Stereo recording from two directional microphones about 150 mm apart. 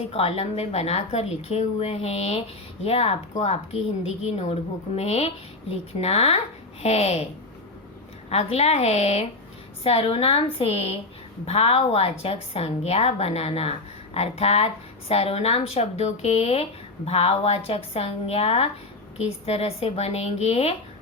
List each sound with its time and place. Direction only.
0.1 s a woman's voice: 40° left (ahead or behind)
8.3 s a woman's voice: 45° left (ahead or behind)